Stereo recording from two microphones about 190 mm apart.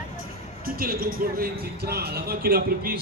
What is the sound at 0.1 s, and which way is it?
A man's voice, 50° right (ahead or behind).